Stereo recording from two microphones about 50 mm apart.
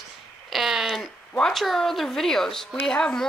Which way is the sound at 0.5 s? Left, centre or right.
Centre.